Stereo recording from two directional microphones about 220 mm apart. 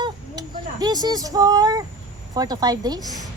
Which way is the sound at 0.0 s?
20° right (ahead or behind).